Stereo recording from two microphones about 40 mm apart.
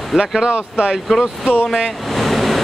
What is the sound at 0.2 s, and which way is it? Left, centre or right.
Speech, centre.